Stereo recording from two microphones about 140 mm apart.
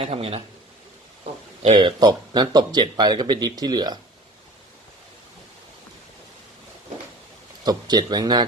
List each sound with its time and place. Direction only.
0.0 s speech: 45° right (ahead or behind)
1.2 s a sound: 50° right (ahead or behind)
1.8 s speech: 30° right (ahead or behind)
7.6 s speech: 30° right (ahead or behind)